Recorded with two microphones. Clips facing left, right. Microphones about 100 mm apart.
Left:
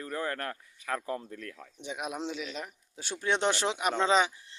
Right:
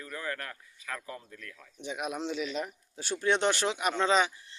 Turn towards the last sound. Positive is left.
turn(degrees=20)  # may be behind; listen again after turning